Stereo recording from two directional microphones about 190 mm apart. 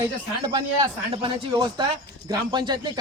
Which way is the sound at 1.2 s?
25° right (ahead or behind).